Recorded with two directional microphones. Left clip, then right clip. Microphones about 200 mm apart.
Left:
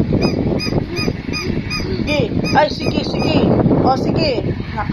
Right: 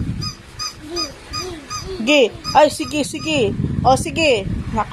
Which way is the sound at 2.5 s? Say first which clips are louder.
Right 2 dB; 35° right (ahead or behind).